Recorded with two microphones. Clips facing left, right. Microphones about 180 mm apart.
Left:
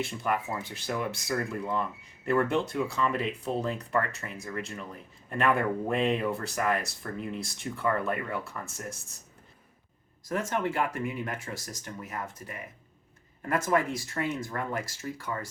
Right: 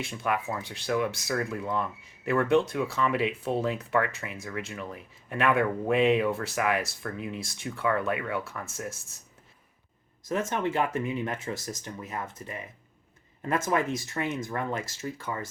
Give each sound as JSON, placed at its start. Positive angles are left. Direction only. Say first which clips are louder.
{"t": 0.0, "sound": "speech", "louder": "even", "side_deg": 0}
{"t": 10.2, "sound": "speech", "louder": "right 1 dB", "side_deg": -20}